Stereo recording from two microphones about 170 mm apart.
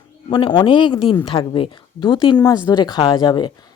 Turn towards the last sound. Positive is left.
turn(degrees=25)  # may be behind; listen again after turning